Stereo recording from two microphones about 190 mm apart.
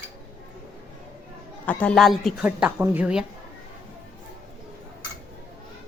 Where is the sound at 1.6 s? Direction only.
10° left (ahead or behind).